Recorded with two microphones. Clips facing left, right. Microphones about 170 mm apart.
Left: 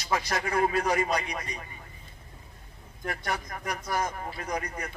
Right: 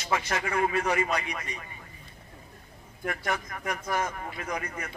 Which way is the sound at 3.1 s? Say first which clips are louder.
Right 1 dB; 35° left (ahead or behind).